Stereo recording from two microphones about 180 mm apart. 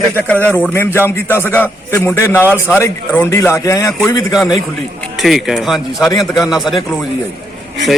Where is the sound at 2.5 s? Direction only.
10° right (ahead or behind).